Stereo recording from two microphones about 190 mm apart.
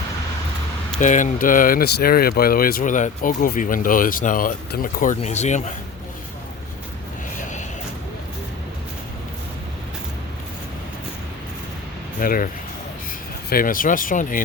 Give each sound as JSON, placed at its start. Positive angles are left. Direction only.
{"t": 0.9, "sound": "speech", "side_deg": 40}
{"t": 7.3, "sound": "a sound", "side_deg": 40}
{"t": 12.2, "sound": "speech", "side_deg": 50}
{"t": 13.5, "sound": "speech", "side_deg": 50}